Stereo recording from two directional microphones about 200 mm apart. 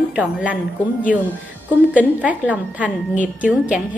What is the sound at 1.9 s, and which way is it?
A woman's voice, 5° right (ahead or behind).